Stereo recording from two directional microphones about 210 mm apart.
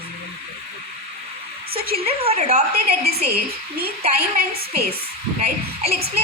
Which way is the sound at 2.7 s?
50° right (ahead or behind).